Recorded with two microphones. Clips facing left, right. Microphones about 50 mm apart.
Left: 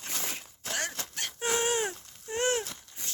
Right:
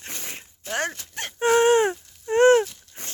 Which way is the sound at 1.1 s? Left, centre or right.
Right.